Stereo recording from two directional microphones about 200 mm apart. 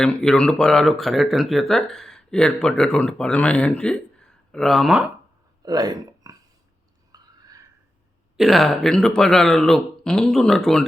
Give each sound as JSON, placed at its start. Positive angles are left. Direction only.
{"t": 0.0, "sound": "speech", "side_deg": 5}
{"t": 5.6, "sound": "speech", "side_deg": -20}
{"t": 7.1, "sound": "a sound", "side_deg": -20}
{"t": 8.4, "sound": "speech", "side_deg": 0}